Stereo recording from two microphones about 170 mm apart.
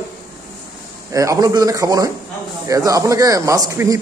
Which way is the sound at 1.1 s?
20° right (ahead or behind).